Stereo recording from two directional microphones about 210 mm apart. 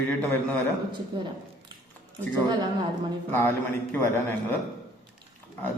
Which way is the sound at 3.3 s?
10° left (ahead or behind).